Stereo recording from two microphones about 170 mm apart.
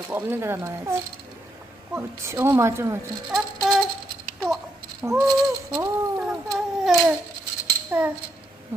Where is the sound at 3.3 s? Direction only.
5° right (ahead or behind).